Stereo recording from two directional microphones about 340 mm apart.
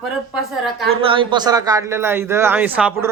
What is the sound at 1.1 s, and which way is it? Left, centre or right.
A man's voice, centre.